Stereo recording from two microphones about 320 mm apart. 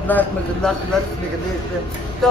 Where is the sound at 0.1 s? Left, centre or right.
Centre.